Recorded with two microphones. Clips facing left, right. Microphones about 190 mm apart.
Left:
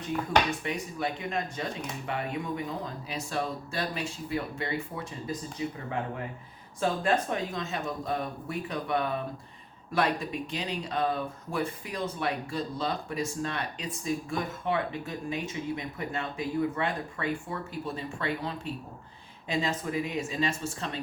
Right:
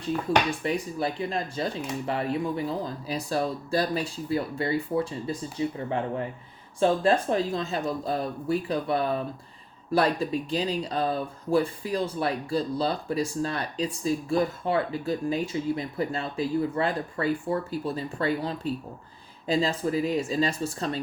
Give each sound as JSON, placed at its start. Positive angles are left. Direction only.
{"t": 0.3, "sound": "speech", "side_deg": -30}